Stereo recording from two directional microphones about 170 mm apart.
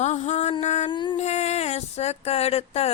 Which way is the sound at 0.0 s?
40° left (ahead or behind).